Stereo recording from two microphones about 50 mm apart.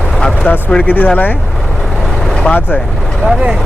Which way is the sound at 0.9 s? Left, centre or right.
Left.